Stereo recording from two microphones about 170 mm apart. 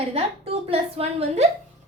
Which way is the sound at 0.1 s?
35° right (ahead or behind).